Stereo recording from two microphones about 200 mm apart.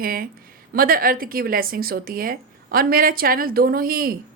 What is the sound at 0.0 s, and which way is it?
Speech, 45° right (ahead or behind).